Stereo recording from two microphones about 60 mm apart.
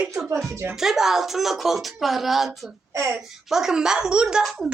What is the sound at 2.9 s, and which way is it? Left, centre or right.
Speech, right.